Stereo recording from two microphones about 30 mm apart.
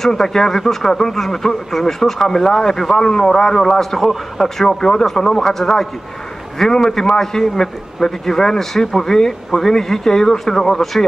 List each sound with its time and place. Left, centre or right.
0.0 s a man's voice: centre